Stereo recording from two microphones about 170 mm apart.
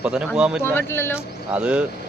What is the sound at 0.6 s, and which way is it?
Speech, 15° left (ahead or behind).